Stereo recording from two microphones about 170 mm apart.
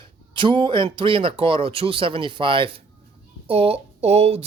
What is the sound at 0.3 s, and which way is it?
Speech, 30° right (ahead or behind).